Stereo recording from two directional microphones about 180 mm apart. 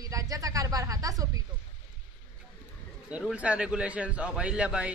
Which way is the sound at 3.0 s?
5° right (ahead or behind).